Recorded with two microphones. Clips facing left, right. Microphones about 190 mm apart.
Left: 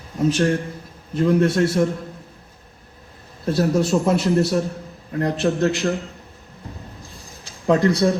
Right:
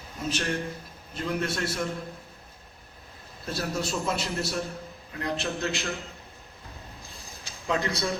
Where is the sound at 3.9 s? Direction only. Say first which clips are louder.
Left 11 dB; 50° left (ahead or behind).